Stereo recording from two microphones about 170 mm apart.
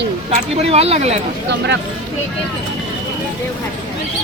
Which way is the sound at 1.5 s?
90° right.